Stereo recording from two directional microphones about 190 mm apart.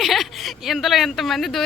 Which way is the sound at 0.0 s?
Centre (ahead or behind).